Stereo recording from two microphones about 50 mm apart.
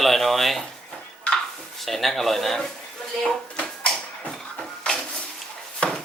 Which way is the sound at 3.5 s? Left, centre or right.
Left.